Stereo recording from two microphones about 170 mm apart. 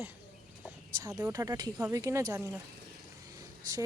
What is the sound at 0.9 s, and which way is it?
Speech, 20° right (ahead or behind).